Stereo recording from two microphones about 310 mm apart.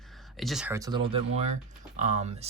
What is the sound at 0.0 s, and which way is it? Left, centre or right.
Speech, centre.